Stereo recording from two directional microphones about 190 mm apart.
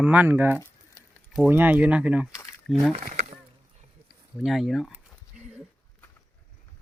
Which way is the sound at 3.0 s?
35° right (ahead or behind).